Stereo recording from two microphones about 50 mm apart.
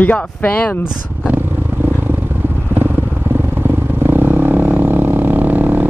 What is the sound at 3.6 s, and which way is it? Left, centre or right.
Vehicle, right.